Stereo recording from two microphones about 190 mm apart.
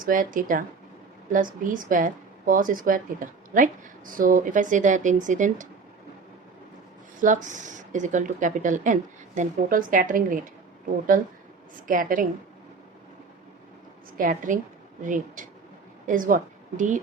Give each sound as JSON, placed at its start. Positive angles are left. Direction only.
{"t": 0.0, "sound": "a woman's voice", "side_deg": -45}
{"t": 7.2, "sound": "a woman's voice", "side_deg": -40}
{"t": 14.2, "sound": "a woman's voice", "side_deg": -45}